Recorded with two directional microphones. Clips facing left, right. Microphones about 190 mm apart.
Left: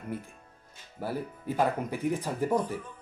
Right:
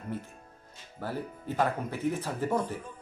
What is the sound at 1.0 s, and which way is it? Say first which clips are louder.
Speech: left 2 dB; 10° left (ahead or behind).